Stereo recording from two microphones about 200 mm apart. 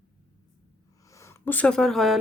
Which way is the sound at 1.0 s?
15° left (ahead or behind).